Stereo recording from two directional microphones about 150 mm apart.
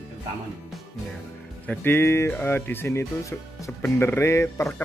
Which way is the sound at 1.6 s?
10° left (ahead or behind).